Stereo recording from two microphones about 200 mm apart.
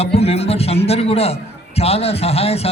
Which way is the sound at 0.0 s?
30° left (ahead or behind).